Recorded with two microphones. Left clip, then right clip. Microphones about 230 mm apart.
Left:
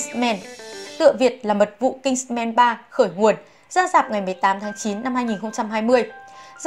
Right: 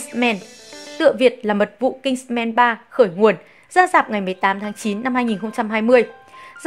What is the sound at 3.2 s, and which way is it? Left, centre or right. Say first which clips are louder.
Speech: right 2 dB; right.